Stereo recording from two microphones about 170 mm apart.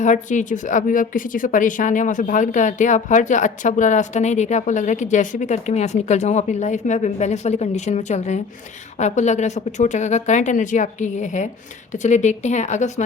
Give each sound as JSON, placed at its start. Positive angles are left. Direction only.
{"t": 0.0, "sound": "a woman's voice", "side_deg": 45}